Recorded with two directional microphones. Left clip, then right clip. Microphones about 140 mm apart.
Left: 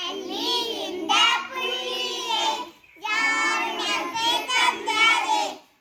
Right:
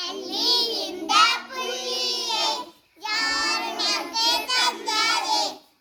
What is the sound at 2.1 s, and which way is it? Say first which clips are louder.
Child singing: even; 50° right (ahead or behind).